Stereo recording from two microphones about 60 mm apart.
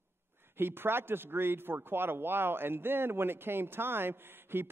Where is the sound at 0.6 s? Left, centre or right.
Right.